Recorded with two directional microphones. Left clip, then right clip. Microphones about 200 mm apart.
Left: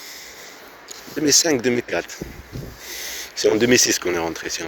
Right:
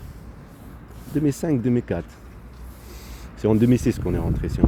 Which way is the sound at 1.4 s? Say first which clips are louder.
Left 3 dB; 10° left (ahead or behind).